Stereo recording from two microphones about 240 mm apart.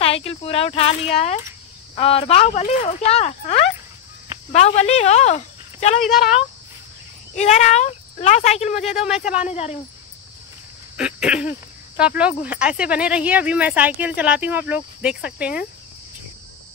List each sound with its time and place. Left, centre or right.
0.0 s speech: left
5.9 s speech: centre
7.3 s speech: left
8.9 s speech: centre
9.5 s speech: left
11.0 s speech: centre